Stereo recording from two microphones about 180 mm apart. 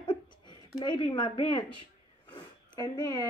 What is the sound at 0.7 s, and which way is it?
Speech, 25° left (ahead or behind).